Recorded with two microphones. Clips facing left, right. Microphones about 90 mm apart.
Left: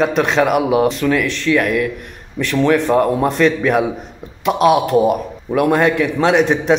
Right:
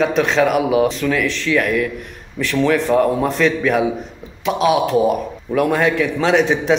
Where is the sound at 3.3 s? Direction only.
5° left (ahead or behind).